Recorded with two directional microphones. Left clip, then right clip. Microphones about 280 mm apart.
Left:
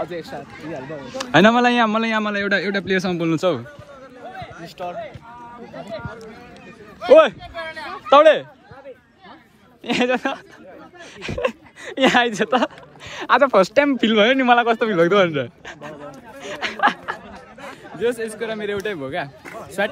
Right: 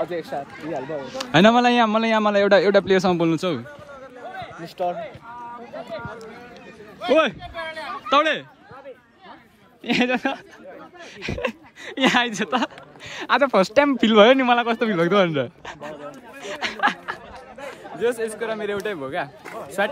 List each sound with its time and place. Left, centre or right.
0.1 s speech: right
1.0 s a man's voice: centre
4.7 s speech: right
8.1 s a man's voice: centre
9.8 s a man's voice: centre
17.6 s a sound: right
18.0 s a man's voice: centre